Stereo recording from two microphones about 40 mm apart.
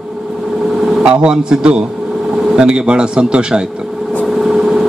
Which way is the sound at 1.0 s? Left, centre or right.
Right.